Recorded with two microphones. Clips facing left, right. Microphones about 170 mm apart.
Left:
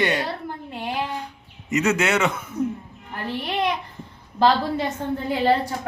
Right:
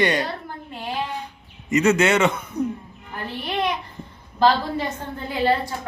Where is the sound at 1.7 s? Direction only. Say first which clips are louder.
Right 3 dB; 5° left (ahead or behind).